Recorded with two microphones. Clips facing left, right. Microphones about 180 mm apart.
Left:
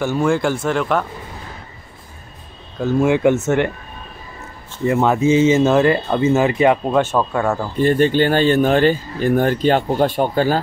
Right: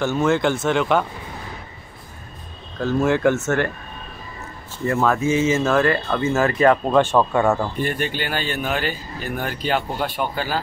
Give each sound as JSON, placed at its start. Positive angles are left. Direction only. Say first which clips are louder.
{"t": 0.3, "sound": "speech", "louder": "left 1 dB", "side_deg": 5}
{"t": 2.8, "sound": "speech", "louder": "left 3 dB", "side_deg": 15}
{"t": 4.8, "sound": "speech", "louder": "left 4 dB", "side_deg": 15}
{"t": 8.2, "sound": "speech", "louder": "left 11 dB", "side_deg": 45}